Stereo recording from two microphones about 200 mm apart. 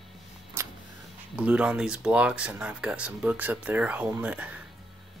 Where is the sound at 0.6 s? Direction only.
15° right (ahead or behind).